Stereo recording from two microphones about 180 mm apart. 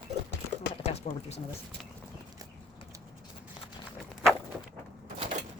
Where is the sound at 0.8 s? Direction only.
35° left (ahead or behind).